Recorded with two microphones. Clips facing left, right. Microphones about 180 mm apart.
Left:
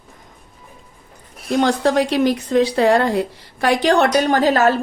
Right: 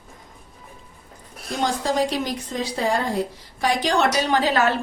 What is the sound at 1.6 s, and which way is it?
Speech, 70° left (ahead or behind).